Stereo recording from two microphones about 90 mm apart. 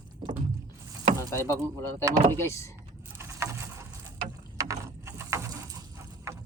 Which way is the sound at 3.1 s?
30° right (ahead or behind).